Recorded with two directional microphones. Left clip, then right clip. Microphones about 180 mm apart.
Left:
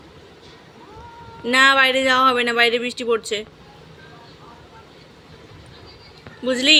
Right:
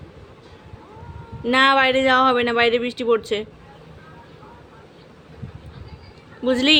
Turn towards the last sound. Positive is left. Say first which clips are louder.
# left 1 dB
turn(degrees=-25)  # may be behind; listen again after turning